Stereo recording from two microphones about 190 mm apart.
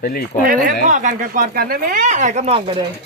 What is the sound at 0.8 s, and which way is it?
Speech, 45° right (ahead or behind).